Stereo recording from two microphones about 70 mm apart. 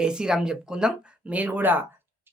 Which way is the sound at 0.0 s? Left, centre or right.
Centre.